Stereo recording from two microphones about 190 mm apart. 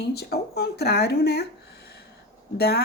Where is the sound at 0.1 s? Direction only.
55° left (ahead or behind).